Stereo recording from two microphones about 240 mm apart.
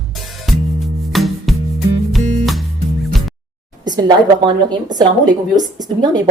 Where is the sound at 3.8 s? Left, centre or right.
Centre.